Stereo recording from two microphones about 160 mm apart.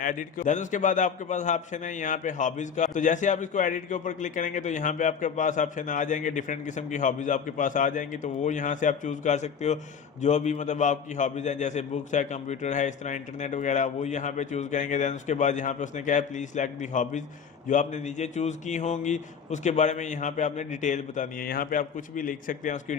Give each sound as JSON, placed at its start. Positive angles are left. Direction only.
{"t": 0.0, "sound": "a man's voice", "side_deg": 55}